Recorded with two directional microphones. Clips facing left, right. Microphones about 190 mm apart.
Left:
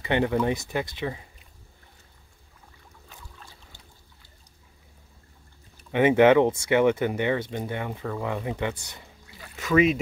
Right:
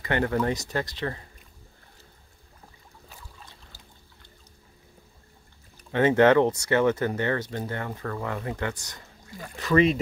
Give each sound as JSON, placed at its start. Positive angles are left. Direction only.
{"t": 0.0, "sound": "speech", "side_deg": 15}
{"t": 3.1, "sound": "boat", "side_deg": -5}
{"t": 5.9, "sound": "speech", "side_deg": 15}
{"t": 9.3, "sound": "speech", "side_deg": -45}
{"t": 9.7, "sound": "speech", "side_deg": 5}